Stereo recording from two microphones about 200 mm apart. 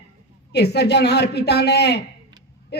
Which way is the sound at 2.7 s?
55° left (ahead or behind).